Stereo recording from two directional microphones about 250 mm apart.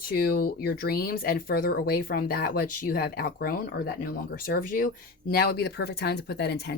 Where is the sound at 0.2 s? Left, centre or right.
Left.